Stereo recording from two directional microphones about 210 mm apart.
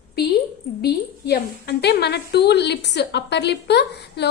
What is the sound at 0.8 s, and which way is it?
A woman's voice, 50° left (ahead or behind).